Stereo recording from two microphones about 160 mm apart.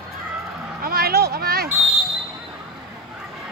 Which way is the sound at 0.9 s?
75° right (ahead or behind).